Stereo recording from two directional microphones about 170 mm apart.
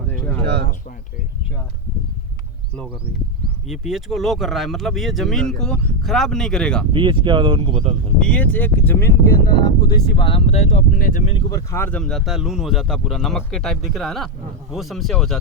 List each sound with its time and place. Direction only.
0.1 s a sound: 10° left (ahead or behind)
3.7 s speech: centre (ahead or behind)
6.9 s speech: 30° right (ahead or behind)
7.8 s speech: 40° right (ahead or behind)
8.2 s speech: 10° left (ahead or behind)
9.6 s speech: 25° left (ahead or behind); by 11.2 s 50° left (ahead or behind)
11.4 s speech: 20° left (ahead or behind); by 15.4 s centre (ahead or behind)